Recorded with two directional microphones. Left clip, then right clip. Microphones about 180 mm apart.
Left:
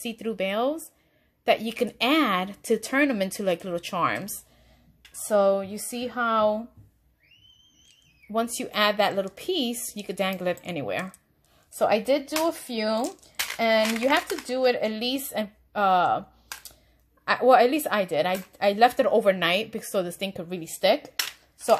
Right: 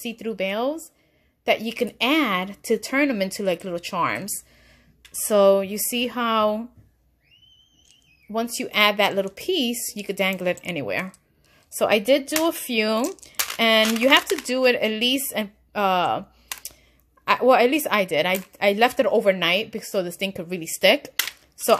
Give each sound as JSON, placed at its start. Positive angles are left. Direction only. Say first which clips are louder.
{"t": 0.0, "sound": "speech", "louder": "right 2 dB", "side_deg": -15}
{"t": 5.3, "sound": "speech", "louder": "right 5 dB", "side_deg": -45}
{"t": 8.3, "sound": "a woman's voice", "louder": "right 1 dB", "side_deg": -20}